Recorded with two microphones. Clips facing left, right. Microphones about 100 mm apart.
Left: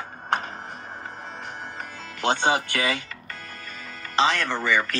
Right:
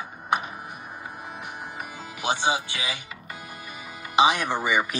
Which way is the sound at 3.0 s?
10° right (ahead or behind).